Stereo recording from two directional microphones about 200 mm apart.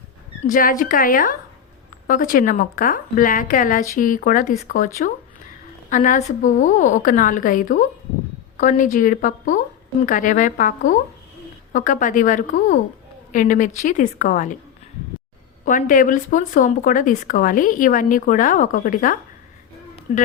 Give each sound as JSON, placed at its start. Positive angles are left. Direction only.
{"t": 0.4, "sound": "a woman's voice", "side_deg": 40}
{"t": 15.6, "sound": "speech", "side_deg": 40}